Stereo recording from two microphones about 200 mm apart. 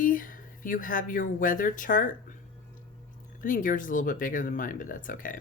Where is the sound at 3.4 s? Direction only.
40° left (ahead or behind).